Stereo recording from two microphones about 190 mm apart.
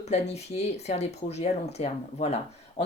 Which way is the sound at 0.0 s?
35° left (ahead or behind).